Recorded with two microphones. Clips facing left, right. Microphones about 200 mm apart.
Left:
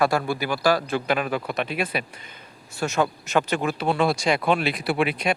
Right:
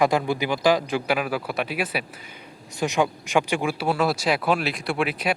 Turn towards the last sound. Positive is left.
turn(degrees=-5)  # may be behind; listen again after turning